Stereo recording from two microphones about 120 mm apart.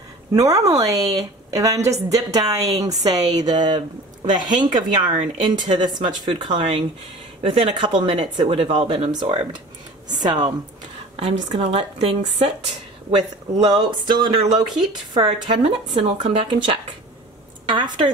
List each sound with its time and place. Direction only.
0.3 s a woman's voice: 30° right (ahead or behind); by 9.1 s 55° right (ahead or behind)
9.1 s a woman's voice: 40° right (ahead or behind)
11.6 s speech: 60° right (ahead or behind)
13.6 s speech: 50° right (ahead or behind)
15.1 s a woman's voice: 50° right (ahead or behind)